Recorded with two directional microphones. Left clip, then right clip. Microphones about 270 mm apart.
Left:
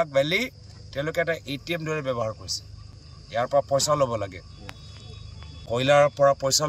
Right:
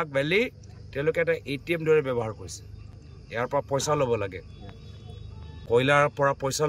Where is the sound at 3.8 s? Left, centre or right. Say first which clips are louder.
Left 2 dB; centre.